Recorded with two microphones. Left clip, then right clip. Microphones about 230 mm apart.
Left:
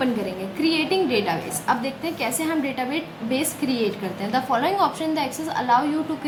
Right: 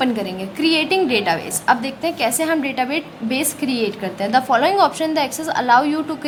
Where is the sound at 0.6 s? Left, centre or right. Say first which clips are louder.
Right 5 dB; right.